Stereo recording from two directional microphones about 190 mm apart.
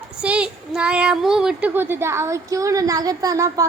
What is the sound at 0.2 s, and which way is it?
Speech, 5° right (ahead or behind).